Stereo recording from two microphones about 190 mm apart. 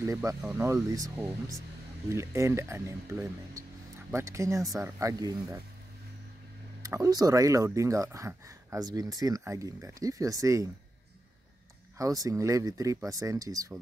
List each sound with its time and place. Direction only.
0.0 s speech: 15° right (ahead or behind)
6.8 s speech: 15° right (ahead or behind)
12.0 s speech: 20° right (ahead or behind)